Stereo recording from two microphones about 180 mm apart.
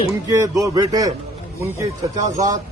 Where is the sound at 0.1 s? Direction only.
20° right (ahead or behind).